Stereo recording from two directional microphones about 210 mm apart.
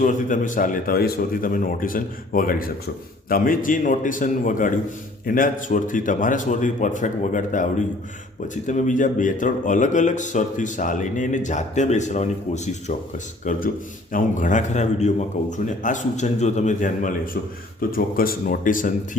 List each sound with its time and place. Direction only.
0.0 s speech: 40° left (ahead or behind)